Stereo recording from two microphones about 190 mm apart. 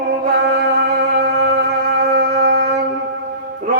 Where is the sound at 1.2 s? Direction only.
55° right (ahead or behind).